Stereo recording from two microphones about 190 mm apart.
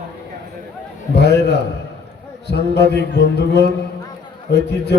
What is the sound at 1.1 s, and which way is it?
A man's voice, 60° left (ahead or behind).